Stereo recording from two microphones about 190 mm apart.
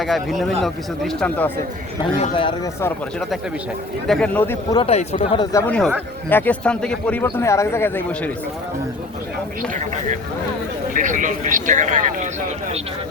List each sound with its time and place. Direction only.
0.0 s a man's voice: centre (ahead or behind)
2.1 s speech: 30° left (ahead or behind)
4.0 s a man's voice: 5° left (ahead or behind)
4.7 s speech: 30° left (ahead or behind)
5.5 s speech: 15° left (ahead or behind)
9.7 s speech: 40° right (ahead or behind)